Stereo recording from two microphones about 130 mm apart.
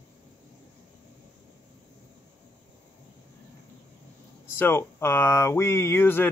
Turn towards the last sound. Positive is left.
turn(degrees=15)  # may be behind; listen again after turning